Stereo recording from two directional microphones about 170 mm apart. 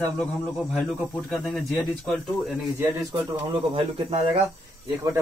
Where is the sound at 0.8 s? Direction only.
5° right (ahead or behind).